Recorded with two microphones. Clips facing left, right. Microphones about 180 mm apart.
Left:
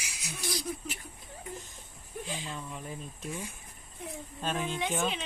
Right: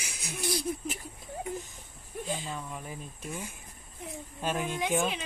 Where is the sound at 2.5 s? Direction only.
5° right (ahead or behind).